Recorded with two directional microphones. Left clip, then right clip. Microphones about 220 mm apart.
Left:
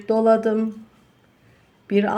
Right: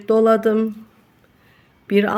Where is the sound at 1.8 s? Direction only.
15° right (ahead or behind).